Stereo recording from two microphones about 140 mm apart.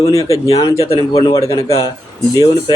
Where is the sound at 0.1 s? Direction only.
25° left (ahead or behind).